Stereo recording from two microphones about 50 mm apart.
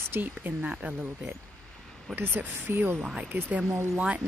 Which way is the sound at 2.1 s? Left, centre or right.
Right.